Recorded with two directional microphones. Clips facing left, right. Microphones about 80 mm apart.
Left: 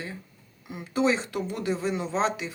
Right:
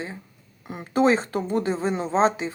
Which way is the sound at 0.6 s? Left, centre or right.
Right.